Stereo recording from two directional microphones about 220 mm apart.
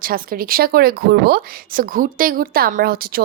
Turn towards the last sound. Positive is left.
turn(degrees=-40)  # may be behind; listen again after turning